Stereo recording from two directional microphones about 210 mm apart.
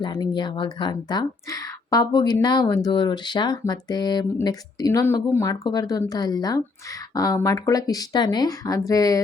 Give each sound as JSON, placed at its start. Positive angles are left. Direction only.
{"t": 0.0, "sound": "a woman's voice", "side_deg": 20}